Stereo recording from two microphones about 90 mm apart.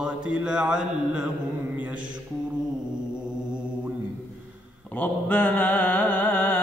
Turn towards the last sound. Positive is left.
turn(degrees=20)  # may be behind; listen again after turning